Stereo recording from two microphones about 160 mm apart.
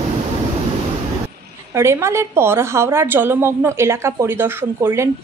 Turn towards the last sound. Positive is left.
turn(degrees=-15)  # may be behind; listen again after turning